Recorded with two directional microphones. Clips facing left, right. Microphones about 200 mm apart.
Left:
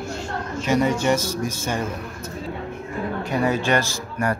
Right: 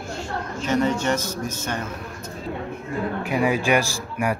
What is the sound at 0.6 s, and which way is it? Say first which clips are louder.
Speech: left 2 dB; 10° left (ahead or behind).